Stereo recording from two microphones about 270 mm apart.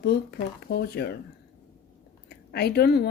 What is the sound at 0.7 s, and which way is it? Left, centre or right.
Speech, left.